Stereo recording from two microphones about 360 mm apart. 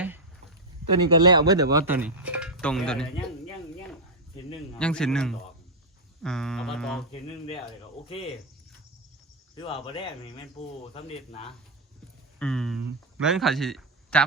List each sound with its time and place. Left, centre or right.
1.0 s speech: centre
4.8 s speech: centre
7.1 s speech: centre
9.6 s speech: centre
12.4 s speech: centre